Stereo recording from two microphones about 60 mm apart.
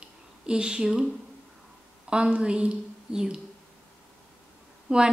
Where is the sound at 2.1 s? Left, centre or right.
Centre.